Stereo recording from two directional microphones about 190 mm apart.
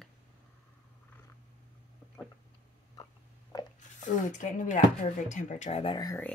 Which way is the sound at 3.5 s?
20° left (ahead or behind).